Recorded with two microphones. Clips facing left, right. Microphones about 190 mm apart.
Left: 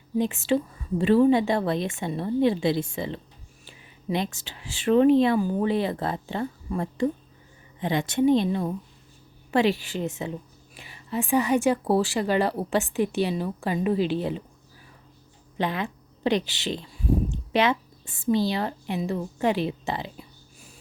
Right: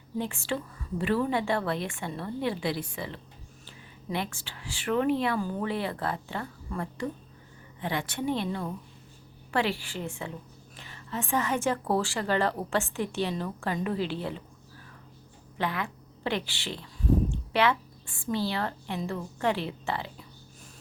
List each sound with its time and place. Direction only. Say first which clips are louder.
0.2 s a woman's voice: left 8 dB; 20° left (ahead or behind)
15.5 s a woman's voice: left 4 dB; 20° left (ahead or behind)